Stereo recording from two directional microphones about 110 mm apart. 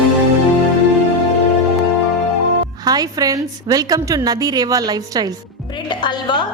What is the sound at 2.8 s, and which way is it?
A woman's voice, 35° right (ahead or behind).